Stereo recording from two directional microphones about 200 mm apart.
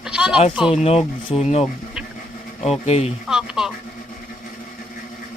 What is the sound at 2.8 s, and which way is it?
Speech, 30° left (ahead or behind).